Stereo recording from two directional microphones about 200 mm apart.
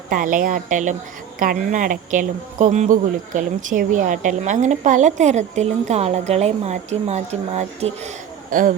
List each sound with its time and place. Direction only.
0.1 s speech: 40° right (ahead or behind)